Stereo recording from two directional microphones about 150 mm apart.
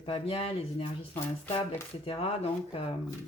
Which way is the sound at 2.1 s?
40° left (ahead or behind).